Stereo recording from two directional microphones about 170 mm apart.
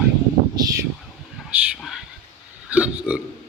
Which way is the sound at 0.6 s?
20° right (ahead or behind).